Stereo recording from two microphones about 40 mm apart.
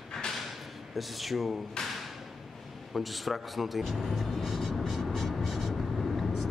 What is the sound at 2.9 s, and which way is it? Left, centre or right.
Speech, centre.